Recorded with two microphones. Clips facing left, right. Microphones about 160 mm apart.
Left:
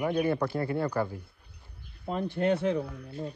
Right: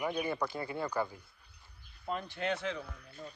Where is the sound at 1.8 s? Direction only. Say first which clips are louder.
Left 6 dB; 60° left (ahead or behind).